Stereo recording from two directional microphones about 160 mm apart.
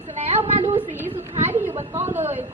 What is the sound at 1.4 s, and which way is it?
Chatter, 15° right (ahead or behind).